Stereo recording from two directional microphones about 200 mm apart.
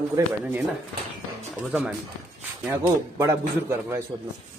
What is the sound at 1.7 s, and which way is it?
Speech, 10° right (ahead or behind).